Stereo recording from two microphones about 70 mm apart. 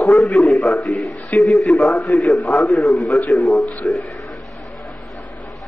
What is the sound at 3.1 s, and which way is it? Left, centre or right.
Speech, left.